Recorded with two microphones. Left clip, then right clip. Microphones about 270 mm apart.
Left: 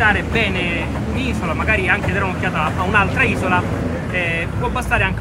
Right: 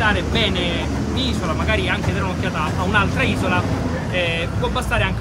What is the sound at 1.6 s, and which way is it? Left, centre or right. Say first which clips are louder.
Speech: left 5 dB; centre.